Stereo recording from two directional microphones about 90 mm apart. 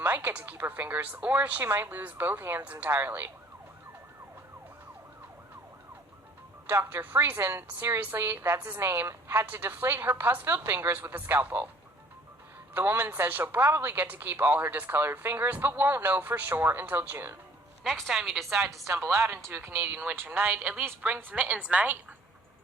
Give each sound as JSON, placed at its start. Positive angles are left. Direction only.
{"t": 0.0, "sound": "speech", "side_deg": -20}
{"t": 6.7, "sound": "speech", "side_deg": -20}
{"t": 12.7, "sound": "speech", "side_deg": -25}
{"t": 17.8, "sound": "a woman's voice", "side_deg": 0}
{"t": 18.6, "sound": "speech", "side_deg": -30}